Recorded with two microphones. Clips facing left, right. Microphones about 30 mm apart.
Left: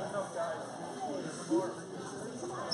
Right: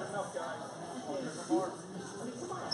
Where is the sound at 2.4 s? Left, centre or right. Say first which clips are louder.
Left 2 dB; centre.